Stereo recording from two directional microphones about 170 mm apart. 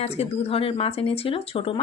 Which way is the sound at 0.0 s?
40° left (ahead or behind).